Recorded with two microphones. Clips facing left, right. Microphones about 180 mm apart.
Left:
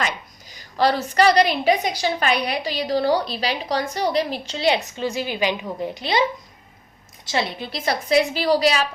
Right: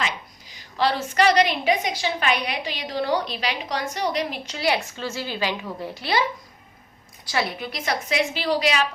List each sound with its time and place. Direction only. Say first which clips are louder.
0.0 s a woman's voice: left 3 dB; 45° left (ahead or behind); by 6.2 s 20° left (ahead or behind)
7.3 s a woman's voice: left 1 dB; 25° left (ahead or behind)